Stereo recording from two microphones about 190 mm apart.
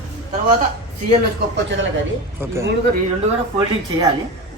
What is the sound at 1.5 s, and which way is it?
Speech, 75° right (ahead or behind).